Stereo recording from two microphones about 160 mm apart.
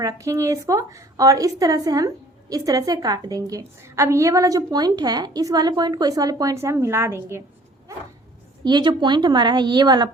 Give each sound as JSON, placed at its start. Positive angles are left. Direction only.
{"t": 0.0, "sound": "a woman's voice", "side_deg": -20}
{"t": 8.6, "sound": "a woman's voice", "side_deg": -30}